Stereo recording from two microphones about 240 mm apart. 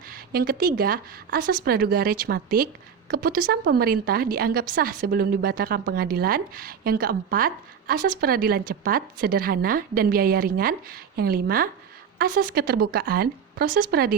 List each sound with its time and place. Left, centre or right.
0.1 s a woman's voice: right